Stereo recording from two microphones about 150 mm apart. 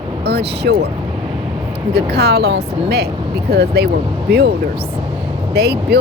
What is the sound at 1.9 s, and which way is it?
Speech, 90° right.